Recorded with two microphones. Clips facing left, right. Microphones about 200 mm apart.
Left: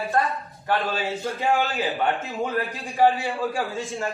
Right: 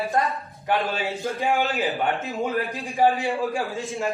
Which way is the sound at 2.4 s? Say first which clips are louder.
Right 1 dB; 15° right (ahead or behind).